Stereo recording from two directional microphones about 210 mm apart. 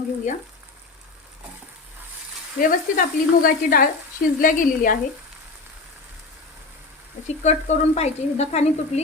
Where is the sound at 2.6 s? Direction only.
40° left (ahead or behind).